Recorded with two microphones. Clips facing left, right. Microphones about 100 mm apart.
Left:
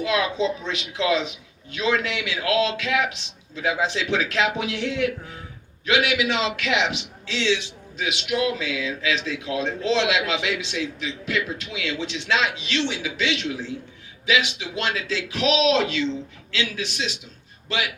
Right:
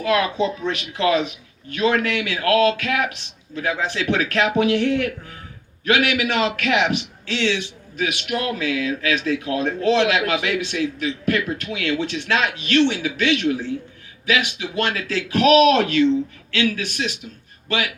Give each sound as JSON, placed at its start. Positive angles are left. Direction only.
{"t": 0.0, "sound": "a man's voice", "side_deg": -55}